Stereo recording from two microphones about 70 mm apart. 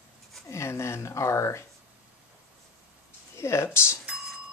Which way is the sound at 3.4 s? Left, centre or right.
Left.